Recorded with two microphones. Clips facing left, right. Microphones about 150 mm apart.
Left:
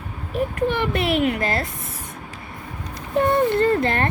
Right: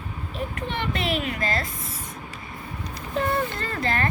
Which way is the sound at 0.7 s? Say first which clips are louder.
Left 6 dB; 60° left (ahead or behind).